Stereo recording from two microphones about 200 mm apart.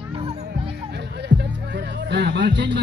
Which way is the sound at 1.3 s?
65° right (ahead or behind).